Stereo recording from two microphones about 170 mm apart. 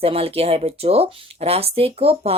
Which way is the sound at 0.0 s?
35° right (ahead or behind).